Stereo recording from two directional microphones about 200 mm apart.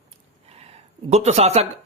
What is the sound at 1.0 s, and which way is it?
Speech, 35° right (ahead or behind).